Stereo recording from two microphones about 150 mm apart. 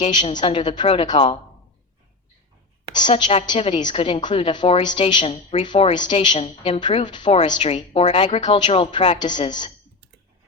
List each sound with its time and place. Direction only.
0.0 s a woman's voice: 35° left (ahead or behind)
2.9 s a woman's voice: 30° left (ahead or behind)
6.7 s a woman's voice: 30° left (ahead or behind)